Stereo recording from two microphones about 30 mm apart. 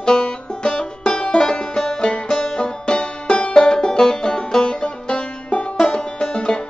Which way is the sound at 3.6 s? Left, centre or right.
Left.